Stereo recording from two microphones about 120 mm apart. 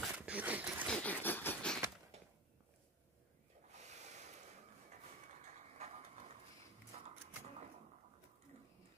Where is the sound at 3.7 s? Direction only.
70° right (ahead or behind).